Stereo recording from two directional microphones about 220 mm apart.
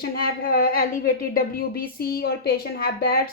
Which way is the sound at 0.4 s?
40° left (ahead or behind).